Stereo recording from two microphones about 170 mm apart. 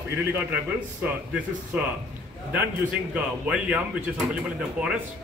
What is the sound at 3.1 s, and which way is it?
A man's voice, 5° right (ahead or behind).